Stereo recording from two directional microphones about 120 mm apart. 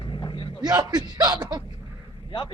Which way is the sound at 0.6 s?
35° right (ahead or behind).